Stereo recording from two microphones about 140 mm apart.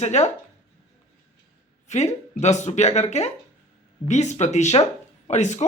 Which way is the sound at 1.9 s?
50° left (ahead or behind).